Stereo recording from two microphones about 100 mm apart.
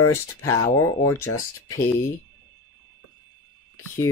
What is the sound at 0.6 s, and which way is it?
Speech, 30° left (ahead or behind).